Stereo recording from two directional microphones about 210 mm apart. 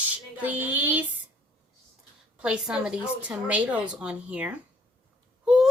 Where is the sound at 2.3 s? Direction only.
5° right (ahead or behind).